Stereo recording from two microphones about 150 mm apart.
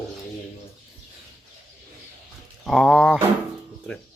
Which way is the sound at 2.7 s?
Centre (ahead or behind).